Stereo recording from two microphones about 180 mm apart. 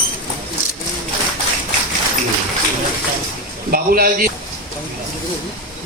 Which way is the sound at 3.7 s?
55° right (ahead or behind).